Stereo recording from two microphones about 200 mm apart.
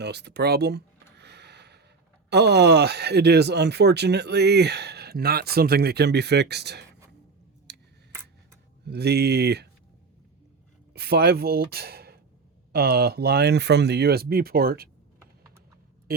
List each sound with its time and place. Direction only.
0.0 s speech: 55° right (ahead or behind)
1.2 s a sound: 55° right (ahead or behind)
2.3 s speech: 55° right (ahead or behind)
8.8 s speech: 55° right (ahead or behind)
10.9 s speech: 55° right (ahead or behind)